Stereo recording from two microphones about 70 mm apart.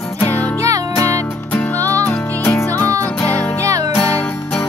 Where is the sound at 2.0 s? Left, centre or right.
Left.